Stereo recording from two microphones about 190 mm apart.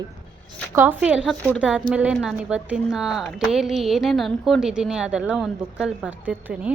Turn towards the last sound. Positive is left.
turn(degrees=-10)  # may be behind; listen again after turning